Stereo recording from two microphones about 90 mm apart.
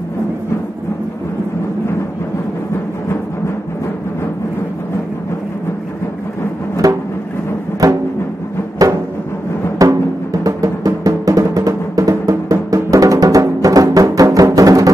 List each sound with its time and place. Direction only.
6.8 s music: 40° right (ahead or behind)